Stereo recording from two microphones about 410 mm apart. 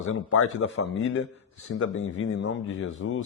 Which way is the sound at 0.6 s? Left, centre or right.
Left.